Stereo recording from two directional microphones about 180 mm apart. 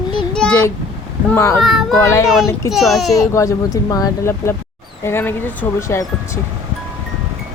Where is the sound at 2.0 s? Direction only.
15° left (ahead or behind).